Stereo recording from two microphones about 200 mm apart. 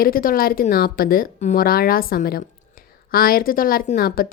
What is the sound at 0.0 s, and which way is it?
A woman's voice, 45° left (ahead or behind).